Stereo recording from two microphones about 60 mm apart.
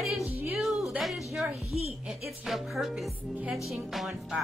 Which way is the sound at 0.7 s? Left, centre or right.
Centre.